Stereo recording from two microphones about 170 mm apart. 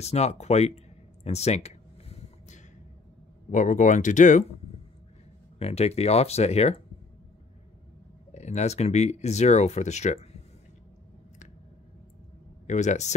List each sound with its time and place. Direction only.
0.0 s speech: 40° left (ahead or behind)
1.2 s a sound: 40° left (ahead or behind)
3.5 s speech: 45° left (ahead or behind)
5.6 s speech: 35° left (ahead or behind)
8.3 s speech: 40° left (ahead or behind)
12.6 s speech: 45° left (ahead or behind)